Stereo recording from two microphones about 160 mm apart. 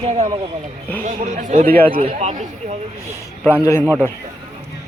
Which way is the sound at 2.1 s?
50° right (ahead or behind).